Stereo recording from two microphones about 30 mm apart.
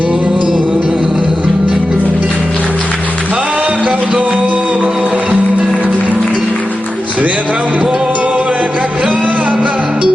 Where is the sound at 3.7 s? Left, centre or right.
Right.